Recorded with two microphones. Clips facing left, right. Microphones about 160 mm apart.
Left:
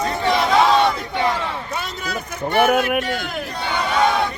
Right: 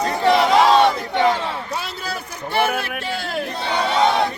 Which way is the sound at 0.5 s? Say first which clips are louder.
Right 2 dB; 30° right (ahead or behind).